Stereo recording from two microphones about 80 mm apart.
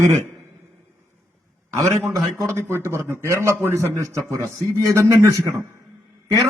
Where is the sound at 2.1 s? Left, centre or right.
Right.